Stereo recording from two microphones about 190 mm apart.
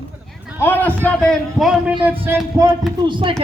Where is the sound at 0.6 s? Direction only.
10° left (ahead or behind).